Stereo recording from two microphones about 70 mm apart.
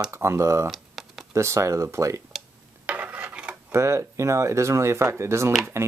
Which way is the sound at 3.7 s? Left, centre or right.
Right.